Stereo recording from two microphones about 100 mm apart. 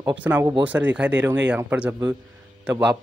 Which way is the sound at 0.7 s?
15° right (ahead or behind).